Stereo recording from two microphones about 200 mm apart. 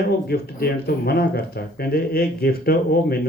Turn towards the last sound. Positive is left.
turn(degrees=50)  # may be behind; listen again after turning